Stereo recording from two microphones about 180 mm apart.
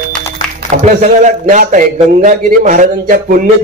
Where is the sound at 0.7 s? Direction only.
45° right (ahead or behind).